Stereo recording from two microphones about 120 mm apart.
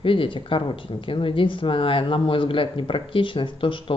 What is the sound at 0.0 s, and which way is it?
A woman's voice, 45° left (ahead or behind).